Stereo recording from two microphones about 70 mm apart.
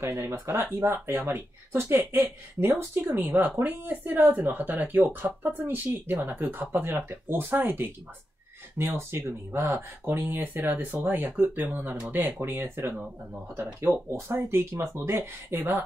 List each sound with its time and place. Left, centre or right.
0.0 s speech: right
0.8 s speech: right